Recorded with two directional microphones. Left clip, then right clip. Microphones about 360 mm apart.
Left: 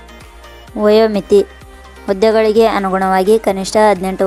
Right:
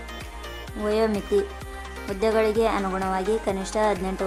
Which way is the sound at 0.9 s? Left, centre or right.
Left.